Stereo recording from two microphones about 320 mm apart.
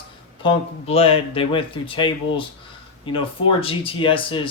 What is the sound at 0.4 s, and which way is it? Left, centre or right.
Speech, centre.